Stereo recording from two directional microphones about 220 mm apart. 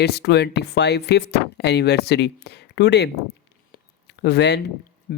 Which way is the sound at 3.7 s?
50° left (ahead or behind).